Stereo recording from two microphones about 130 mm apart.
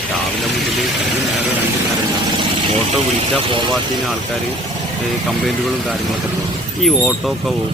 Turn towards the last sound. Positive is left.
turn(degrees=0)  # may be behind; listen again after turning